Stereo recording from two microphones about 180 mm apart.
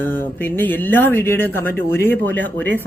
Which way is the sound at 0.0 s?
10° left (ahead or behind).